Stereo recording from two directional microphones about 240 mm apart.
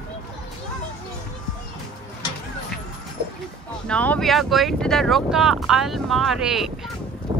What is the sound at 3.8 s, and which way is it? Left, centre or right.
Speech, centre.